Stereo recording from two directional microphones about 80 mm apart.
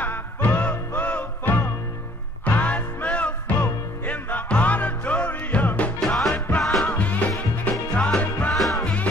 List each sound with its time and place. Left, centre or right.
0.0 s music: centre
5.9 s music: centre
6.3 s music: centre
6.6 s music: centre
8.5 s music: centre
8.8 s music: centre